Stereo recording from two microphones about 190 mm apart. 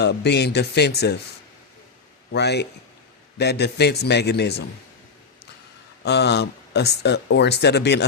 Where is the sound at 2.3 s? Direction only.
60° left (ahead or behind).